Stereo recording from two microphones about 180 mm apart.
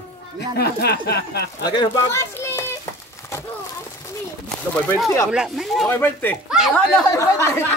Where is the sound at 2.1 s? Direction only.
15° left (ahead or behind).